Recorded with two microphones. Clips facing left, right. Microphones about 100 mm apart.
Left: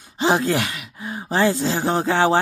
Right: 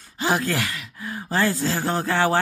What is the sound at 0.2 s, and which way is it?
Speech, 25° left (ahead or behind).